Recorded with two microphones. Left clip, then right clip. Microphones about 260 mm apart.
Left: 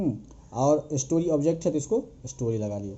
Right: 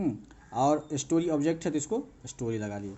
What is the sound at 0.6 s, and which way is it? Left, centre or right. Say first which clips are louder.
Speech: left 3 dB; centre.